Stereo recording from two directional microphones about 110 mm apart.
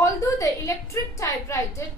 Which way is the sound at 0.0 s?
30° left (ahead or behind).